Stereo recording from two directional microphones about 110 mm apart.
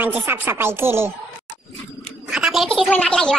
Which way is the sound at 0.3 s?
20° right (ahead or behind).